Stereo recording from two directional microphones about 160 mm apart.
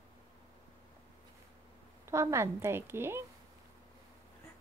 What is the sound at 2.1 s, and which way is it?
A woman's voice, 15° right (ahead or behind).